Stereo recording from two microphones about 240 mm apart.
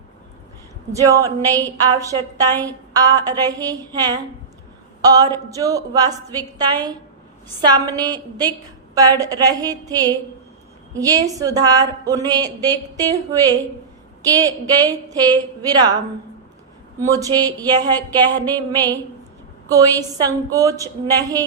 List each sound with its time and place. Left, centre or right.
1.0 s a woman's voice: centre
17.1 s a woman's voice: centre
18.3 s a sound: centre
19.7 s a woman's voice: centre